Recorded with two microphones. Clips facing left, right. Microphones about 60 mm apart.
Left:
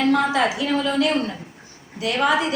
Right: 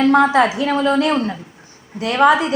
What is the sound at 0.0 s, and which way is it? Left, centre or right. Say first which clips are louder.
A woman's voice: right 6 dB; right.